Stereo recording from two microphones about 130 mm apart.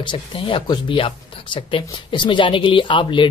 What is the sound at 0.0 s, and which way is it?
Speech, 40° left (ahead or behind).